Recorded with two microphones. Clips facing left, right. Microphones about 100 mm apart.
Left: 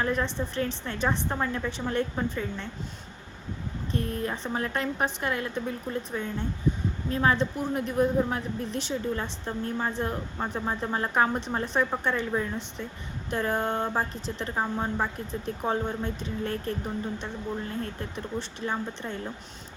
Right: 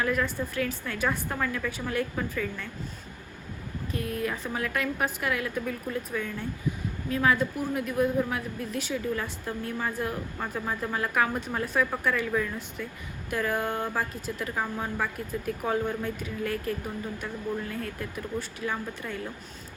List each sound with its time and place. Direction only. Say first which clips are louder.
0.0 s speech: even; 30° left (ahead or behind)
3.9 s speech: left 1 dB; 30° left (ahead or behind)